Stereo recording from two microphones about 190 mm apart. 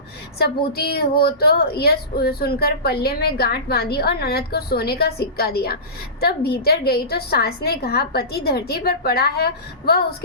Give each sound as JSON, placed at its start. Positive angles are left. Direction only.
{"t": 0.3, "sound": "a woman's voice", "side_deg": 55}